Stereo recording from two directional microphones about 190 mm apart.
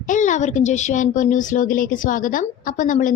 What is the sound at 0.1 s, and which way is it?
A woman's voice, 40° left (ahead or behind).